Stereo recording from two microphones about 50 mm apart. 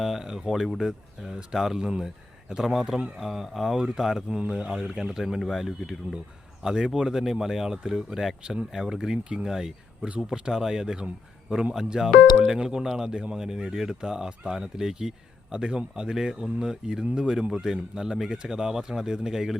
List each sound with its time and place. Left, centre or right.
0.0 s speech: centre
12.5 s speech: centre